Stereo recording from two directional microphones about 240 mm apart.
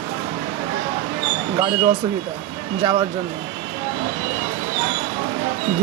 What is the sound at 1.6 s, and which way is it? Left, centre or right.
Speech, right.